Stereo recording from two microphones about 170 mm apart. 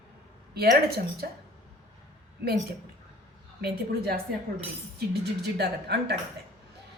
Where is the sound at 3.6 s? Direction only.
65° right (ahead or behind).